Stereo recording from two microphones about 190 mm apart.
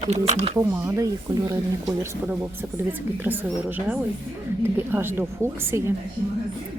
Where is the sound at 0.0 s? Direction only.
35° right (ahead or behind).